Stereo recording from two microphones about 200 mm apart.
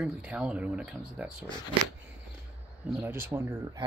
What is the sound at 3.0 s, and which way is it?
Speech, 10° right (ahead or behind).